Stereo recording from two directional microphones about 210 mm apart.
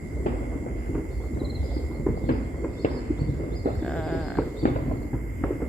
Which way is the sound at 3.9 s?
5° left (ahead or behind).